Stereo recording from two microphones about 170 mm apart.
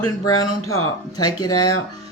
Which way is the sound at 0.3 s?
20° left (ahead or behind).